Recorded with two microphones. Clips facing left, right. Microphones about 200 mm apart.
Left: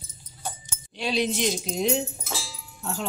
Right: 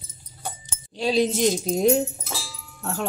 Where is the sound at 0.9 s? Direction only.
40° right (ahead or behind).